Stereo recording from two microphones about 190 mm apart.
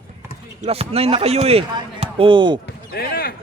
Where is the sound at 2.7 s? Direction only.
55° left (ahead or behind).